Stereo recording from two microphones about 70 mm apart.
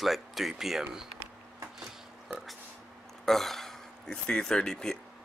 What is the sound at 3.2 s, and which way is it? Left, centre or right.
Speech, centre.